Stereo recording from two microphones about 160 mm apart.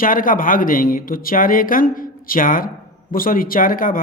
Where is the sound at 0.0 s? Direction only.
60° left (ahead or behind).